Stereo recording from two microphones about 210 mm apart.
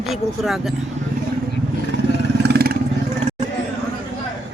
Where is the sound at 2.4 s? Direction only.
50° right (ahead or behind).